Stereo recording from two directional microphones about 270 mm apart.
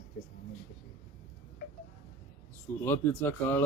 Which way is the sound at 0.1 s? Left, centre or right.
Left.